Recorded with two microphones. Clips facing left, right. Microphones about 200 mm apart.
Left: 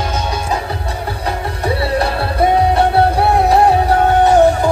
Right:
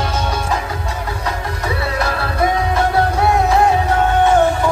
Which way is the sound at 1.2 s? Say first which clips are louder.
Left 5 dB; 30° left (ahead or behind).